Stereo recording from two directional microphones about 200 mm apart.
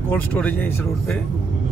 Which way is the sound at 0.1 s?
5° left (ahead or behind).